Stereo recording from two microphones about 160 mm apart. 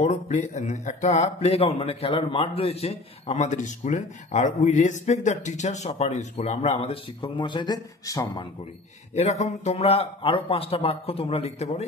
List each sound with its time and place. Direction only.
0.0 s speech: 45° left (ahead or behind); by 8.5 s 20° left (ahead or behind)
9.1 s a man's voice: 45° left (ahead or behind)